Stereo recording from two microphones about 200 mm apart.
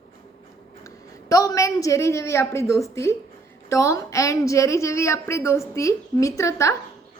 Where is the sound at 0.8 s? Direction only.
15° left (ahead or behind).